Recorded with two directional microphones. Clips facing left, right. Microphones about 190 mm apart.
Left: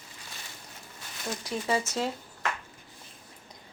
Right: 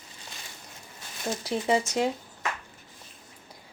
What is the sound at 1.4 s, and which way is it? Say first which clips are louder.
Speech: right 4 dB; 30° right (ahead or behind).